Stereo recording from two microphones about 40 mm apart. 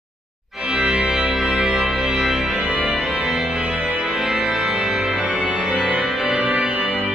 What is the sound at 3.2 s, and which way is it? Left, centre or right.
Music, right.